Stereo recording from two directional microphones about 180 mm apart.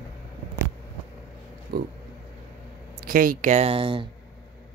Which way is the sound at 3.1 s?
50° right (ahead or behind).